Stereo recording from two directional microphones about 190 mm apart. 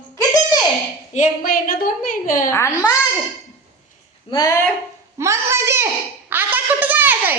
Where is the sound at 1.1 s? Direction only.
45° left (ahead or behind).